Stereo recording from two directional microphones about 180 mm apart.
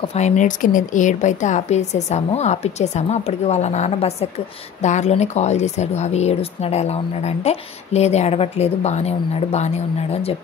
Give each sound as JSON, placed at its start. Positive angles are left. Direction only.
{"t": 0.1, "sound": "speech", "side_deg": 40}